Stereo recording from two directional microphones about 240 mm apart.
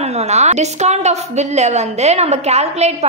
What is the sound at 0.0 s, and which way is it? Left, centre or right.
A woman's voice, right.